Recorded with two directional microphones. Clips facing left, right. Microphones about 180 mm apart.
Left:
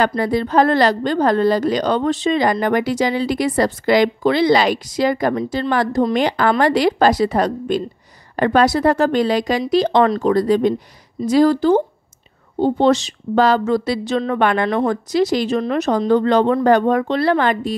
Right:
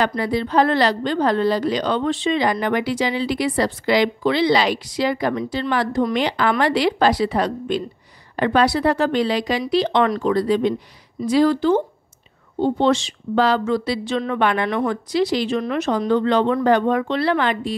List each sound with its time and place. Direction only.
0.0 s a woman's voice: 45° left (ahead or behind)